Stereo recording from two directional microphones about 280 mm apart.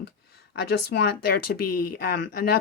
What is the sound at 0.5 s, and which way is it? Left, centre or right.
Speech, left.